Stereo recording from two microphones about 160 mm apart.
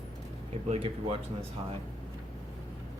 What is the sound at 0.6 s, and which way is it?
Speech, 40° right (ahead or behind).